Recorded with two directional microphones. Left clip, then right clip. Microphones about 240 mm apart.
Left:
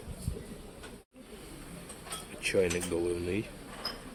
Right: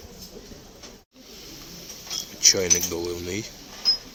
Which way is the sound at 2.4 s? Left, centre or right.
Centre.